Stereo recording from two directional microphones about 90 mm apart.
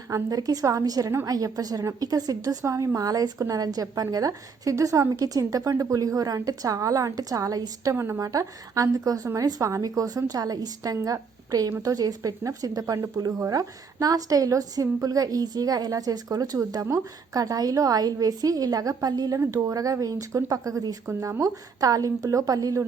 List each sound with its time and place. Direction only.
0.1 s a woman's voice: 45° right (ahead or behind)
7.9 s speech: 30° right (ahead or behind)
8.3 s a woman's voice: 40° right (ahead or behind)